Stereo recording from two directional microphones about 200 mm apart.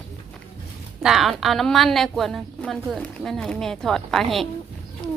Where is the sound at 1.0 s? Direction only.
Centre (ahead or behind).